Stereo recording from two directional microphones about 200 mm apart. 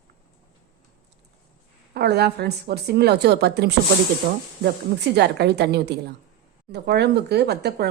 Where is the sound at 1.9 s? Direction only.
55° right (ahead or behind).